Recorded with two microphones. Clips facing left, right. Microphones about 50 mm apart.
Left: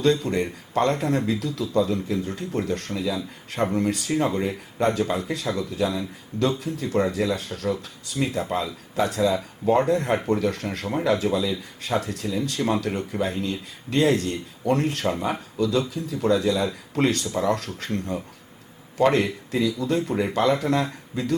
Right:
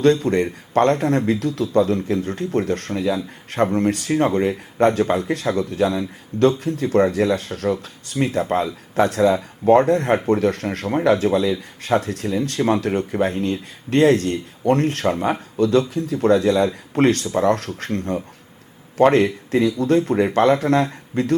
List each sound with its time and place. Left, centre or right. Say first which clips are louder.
0.0 s speech: right 5 dB; right